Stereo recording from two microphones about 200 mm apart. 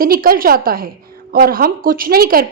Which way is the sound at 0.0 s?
45° right (ahead or behind).